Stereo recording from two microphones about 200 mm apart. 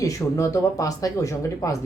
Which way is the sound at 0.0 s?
15° left (ahead or behind).